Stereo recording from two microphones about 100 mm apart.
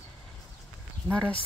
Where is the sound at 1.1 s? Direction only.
10° left (ahead or behind).